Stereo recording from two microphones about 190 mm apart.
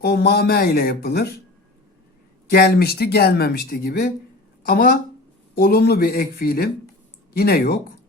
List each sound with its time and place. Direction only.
0.0 s speech: 60° left (ahead or behind)
2.5 s speech: 55° left (ahead or behind)